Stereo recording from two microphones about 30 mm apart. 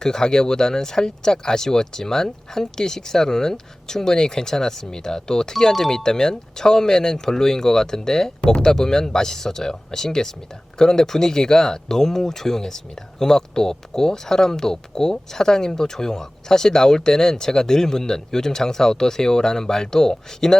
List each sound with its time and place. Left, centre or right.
0.0 s speech: centre